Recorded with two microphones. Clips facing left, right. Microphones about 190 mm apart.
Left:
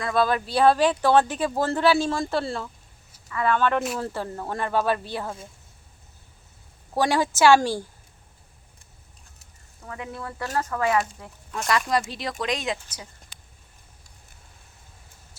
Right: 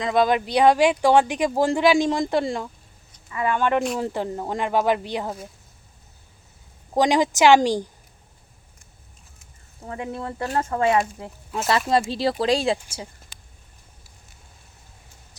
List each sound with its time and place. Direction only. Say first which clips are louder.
0.0 s speech: right 3 dB; 20° right (ahead or behind)
6.9 s speech: right 4 dB; 15° right (ahead or behind)
9.8 s speech: right 5 dB; 30° right (ahead or behind)